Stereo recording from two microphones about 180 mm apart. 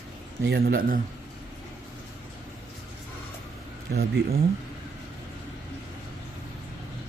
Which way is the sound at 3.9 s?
60° right (ahead or behind).